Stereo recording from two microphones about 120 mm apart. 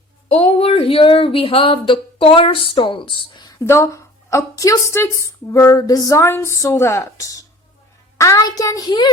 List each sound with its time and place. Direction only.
0.3 s speech: 60° left (ahead or behind); by 3.5 s 40° left (ahead or behind)
3.6 s a woman's voice: 25° left (ahead or behind)